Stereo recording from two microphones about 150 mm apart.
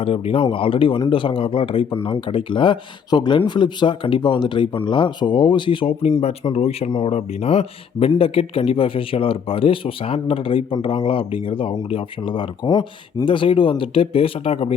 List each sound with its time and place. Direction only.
0.0 s speech: 40° left (ahead or behind)